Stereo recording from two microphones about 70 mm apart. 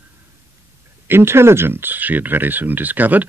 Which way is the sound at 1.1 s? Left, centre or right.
Right.